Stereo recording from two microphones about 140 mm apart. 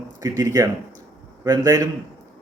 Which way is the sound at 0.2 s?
25° right (ahead or behind).